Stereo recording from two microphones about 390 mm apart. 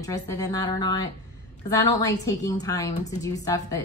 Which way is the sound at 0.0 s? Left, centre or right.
Centre.